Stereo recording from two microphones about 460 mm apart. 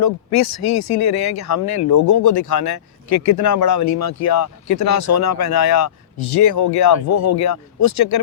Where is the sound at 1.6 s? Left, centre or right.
Left.